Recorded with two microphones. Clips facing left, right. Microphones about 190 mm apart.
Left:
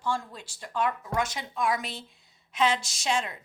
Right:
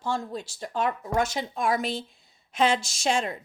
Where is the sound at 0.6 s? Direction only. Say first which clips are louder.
Right 1 dB; 40° right (ahead or behind).